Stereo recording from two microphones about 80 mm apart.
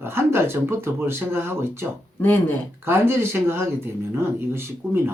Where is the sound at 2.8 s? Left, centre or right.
Right.